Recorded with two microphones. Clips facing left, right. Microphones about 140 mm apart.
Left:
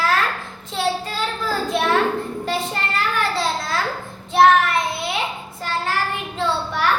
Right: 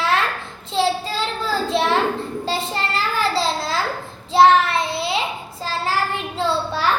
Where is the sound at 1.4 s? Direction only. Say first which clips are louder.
Right 1 dB; 30° right (ahead or behind).